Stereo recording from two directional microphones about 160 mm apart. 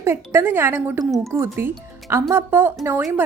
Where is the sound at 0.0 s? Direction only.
15° right (ahead or behind).